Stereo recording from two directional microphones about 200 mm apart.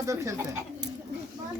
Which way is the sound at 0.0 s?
15° right (ahead or behind).